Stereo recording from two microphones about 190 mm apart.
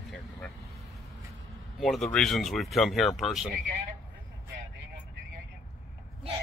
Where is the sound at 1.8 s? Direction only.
Centre (ahead or behind).